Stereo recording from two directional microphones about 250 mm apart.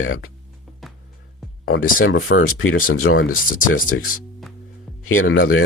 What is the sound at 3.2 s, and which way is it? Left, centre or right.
Speech, left.